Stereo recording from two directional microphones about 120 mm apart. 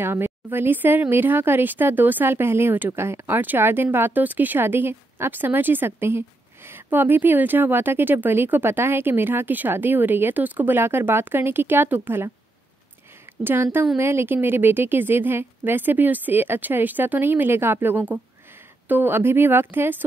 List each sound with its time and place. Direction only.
0.0 s speech: 20° right (ahead or behind)
13.4 s speech: 15° right (ahead or behind)